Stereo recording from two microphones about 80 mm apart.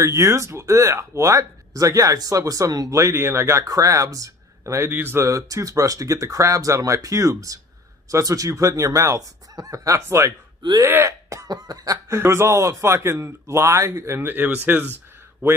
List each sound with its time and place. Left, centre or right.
0.0 s speech: right
3.6 s speech: right
4.9 s speech: right
5.2 s speech: right
11.4 s cough: right
12.1 s speech: right